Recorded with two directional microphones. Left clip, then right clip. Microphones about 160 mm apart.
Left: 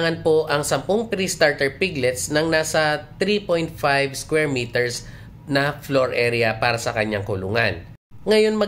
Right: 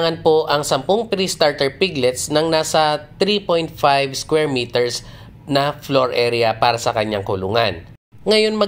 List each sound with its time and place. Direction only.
0.0 s speech: 15° right (ahead or behind)